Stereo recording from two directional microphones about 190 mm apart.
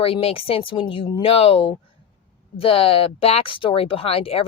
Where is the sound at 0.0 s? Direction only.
30° left (ahead or behind).